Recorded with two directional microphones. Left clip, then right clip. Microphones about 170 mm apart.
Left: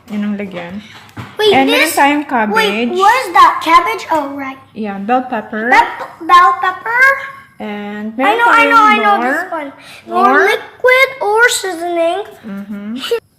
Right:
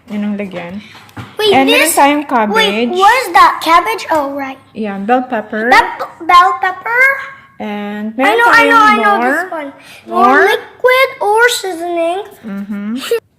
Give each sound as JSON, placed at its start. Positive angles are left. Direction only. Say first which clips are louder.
{"t": 0.1, "sound": "speech", "louder": "right 1 dB", "side_deg": -20}
{"t": 1.6, "sound": "a woman's voice", "louder": "right 2 dB", "side_deg": -45}
{"t": 2.0, "sound": "a woman's voice", "louder": "right 2 dB", "side_deg": -25}
{"t": 3.1, "sound": "a woman's voice", "louder": "even", "side_deg": -55}
{"t": 4.8, "sound": "a woman's voice", "louder": "right 2 dB", "side_deg": -30}
{"t": 5.5, "sound": "a child's voice", "louder": "right 1 dB", "side_deg": -55}
{"t": 7.6, "sound": "a woman's voice", "louder": "right 2 dB", "side_deg": -30}
{"t": 8.2, "sound": "a woman's voice", "louder": "right 1 dB", "side_deg": -50}
{"t": 10.4, "sound": "speech", "louder": "right 1 dB", "side_deg": -15}
{"t": 12.5, "sound": "a woman's voice", "louder": "right 3 dB", "side_deg": -40}
{"t": 12.9, "sound": "speech", "louder": "right 1 dB", "side_deg": -60}